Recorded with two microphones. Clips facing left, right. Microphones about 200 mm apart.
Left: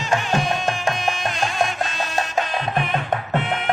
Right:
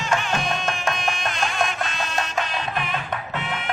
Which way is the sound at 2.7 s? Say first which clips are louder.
Left 5 dB; 50° left (ahead or behind).